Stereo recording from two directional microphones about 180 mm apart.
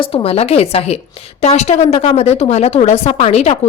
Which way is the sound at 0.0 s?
30° left (ahead or behind).